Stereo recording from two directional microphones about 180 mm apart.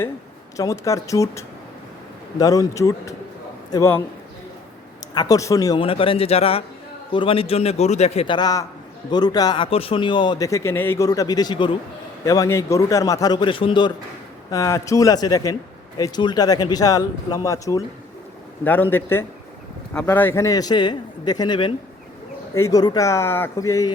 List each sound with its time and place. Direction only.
0.5 s speech: 20° left (ahead or behind)
5.1 s a man's voice: 20° left (ahead or behind)